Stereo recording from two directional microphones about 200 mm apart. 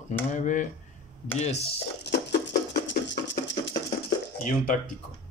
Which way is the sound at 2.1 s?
60° left (ahead or behind).